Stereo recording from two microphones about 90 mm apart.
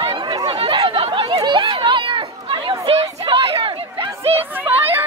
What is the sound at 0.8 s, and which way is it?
Chatter, 70° right (ahead or behind).